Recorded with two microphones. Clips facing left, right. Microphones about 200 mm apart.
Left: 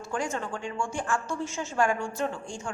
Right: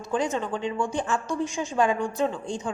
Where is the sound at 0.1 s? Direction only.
20° right (ahead or behind).